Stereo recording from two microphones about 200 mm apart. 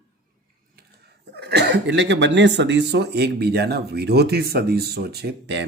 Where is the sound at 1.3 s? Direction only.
55° right (ahead or behind).